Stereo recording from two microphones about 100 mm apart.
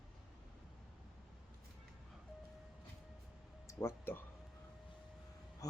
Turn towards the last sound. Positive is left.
turn(degrees=25)  # may be behind; listen again after turning